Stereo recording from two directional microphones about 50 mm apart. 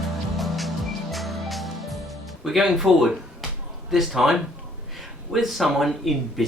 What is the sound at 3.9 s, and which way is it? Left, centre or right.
Speech, centre.